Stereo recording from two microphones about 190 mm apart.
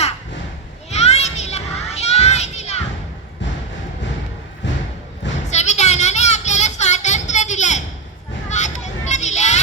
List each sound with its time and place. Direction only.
0.9 s children playing: 35° left (ahead or behind)
4.6 s thump: 70° left (ahead or behind)
5.5 s a sound: 35° left (ahead or behind)